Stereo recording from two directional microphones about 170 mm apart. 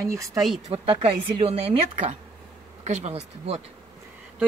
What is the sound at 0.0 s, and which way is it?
Speech, 20° right (ahead or behind).